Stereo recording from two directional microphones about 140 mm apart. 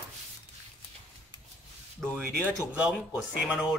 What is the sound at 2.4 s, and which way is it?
Speech, 10° right (ahead or behind).